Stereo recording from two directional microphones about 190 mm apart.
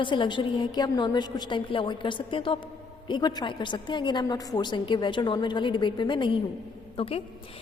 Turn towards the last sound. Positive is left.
turn(degrees=30)  # may be behind; listen again after turning